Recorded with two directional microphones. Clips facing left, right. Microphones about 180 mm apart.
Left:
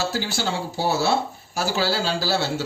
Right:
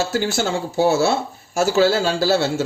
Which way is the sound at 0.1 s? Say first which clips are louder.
Right 5 dB; 50° right (ahead or behind).